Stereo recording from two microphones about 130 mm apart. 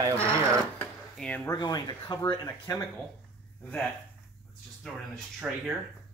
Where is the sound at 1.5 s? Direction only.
30° left (ahead or behind).